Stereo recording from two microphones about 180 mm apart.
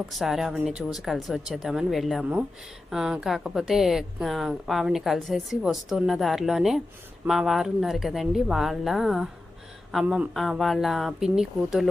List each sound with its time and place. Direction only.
0.1 s a woman's voice: centre (ahead or behind)